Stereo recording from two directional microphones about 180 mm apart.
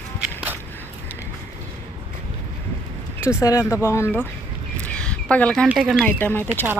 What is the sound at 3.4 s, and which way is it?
Speech, 15° left (ahead or behind).